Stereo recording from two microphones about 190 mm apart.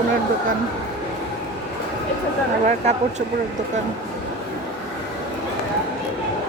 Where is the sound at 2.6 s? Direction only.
35° right (ahead or behind).